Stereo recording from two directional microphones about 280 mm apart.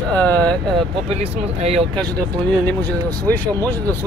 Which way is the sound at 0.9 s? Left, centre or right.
Right.